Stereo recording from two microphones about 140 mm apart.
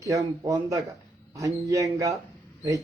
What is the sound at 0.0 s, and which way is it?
A man's voice, 25° right (ahead or behind).